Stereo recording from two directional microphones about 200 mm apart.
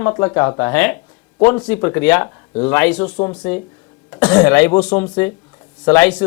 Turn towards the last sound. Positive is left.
turn(degrees=5)  # may be behind; listen again after turning